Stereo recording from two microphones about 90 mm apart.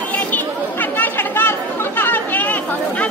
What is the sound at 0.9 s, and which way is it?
Chatter, 25° left (ahead or behind).